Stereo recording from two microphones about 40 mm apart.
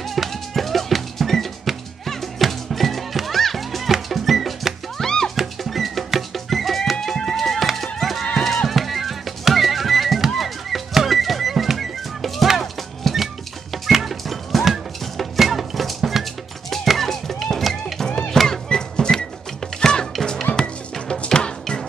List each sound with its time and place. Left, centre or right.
0.0 s music: centre
4.9 s music: centre
5.3 s music: centre
16.8 s a sound: centre
17.6 s music: centre
18.3 s music: centre